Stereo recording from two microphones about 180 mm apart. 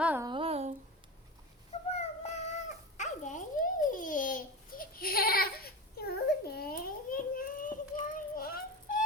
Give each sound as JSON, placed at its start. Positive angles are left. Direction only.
{"t": 0.0, "sound": "humming", "side_deg": -10}
{"t": 0.3, "sound": "humming", "side_deg": -30}
{"t": 1.9, "sound": "cat", "side_deg": 40}
{"t": 8.0, "sound": "music", "side_deg": 50}